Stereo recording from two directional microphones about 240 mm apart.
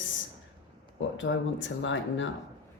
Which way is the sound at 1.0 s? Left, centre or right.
Left.